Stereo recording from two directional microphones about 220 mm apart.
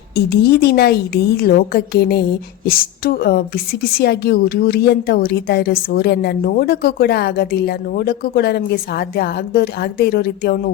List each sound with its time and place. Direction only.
0.3 s a woman's voice: 50° left (ahead or behind)